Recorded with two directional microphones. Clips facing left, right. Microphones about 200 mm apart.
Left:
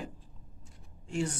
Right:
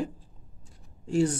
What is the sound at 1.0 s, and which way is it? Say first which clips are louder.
Speech: right 8 dB; 35° right (ahead or behind).